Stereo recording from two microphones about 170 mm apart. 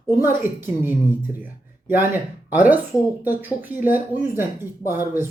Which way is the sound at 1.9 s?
10° right (ahead or behind).